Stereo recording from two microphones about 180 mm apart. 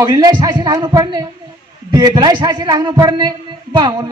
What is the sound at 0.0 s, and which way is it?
A man's voice, 25° right (ahead or behind).